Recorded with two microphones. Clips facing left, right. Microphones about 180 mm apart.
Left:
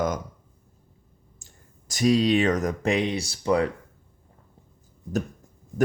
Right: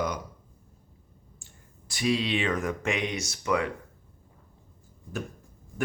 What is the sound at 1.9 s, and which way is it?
Speech, 40° left (ahead or behind).